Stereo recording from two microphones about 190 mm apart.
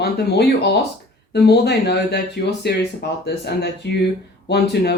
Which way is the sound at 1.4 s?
60° left (ahead or behind).